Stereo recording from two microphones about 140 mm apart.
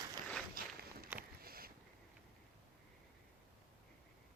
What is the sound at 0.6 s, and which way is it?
Walk, 90° right.